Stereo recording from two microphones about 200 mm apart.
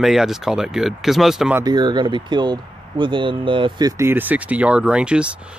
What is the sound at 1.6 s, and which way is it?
Speech, 20° right (ahead or behind).